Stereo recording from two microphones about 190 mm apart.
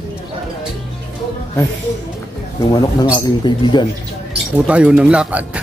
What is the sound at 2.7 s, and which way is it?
Speech, 20° left (ahead or behind).